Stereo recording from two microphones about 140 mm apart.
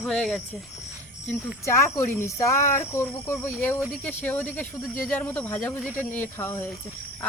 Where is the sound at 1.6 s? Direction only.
20° left (ahead or behind).